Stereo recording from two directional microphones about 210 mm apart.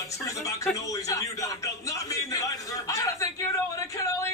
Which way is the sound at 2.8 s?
15° left (ahead or behind).